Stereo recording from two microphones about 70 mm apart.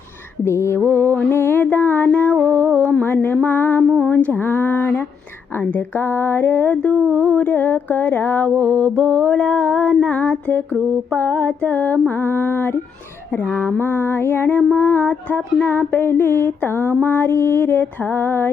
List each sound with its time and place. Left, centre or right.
0.4 s mantra: left
1.7 s a sound: left
2.0 s music: left
2.3 s music: right
3.0 s mantra: left
3.8 s a sound: centre
4.1 s speech: left
5.5 s mantra: left
12.0 s mantra: left
15.1 s mantra: centre
15.7 s mantra: left